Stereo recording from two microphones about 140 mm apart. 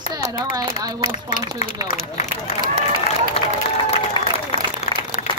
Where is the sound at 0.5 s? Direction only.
35° right (ahead or behind).